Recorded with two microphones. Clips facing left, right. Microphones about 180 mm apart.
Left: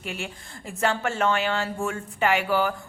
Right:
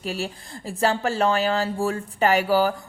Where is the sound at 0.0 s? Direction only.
35° right (ahead or behind).